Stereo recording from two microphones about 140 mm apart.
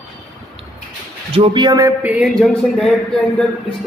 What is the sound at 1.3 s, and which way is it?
Speech, 40° right (ahead or behind).